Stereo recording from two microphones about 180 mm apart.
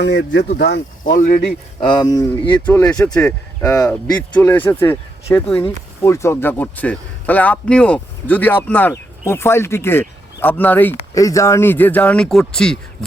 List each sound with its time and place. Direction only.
0.0 s speech: 75° left (ahead or behind)
1.8 s speech: 25° left (ahead or behind)
2.6 s speech: 10° left (ahead or behind)